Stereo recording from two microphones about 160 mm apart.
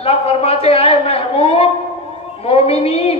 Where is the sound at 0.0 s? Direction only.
40° left (ahead or behind).